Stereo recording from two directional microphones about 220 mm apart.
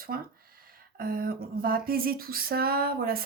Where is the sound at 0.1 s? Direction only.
40° right (ahead or behind).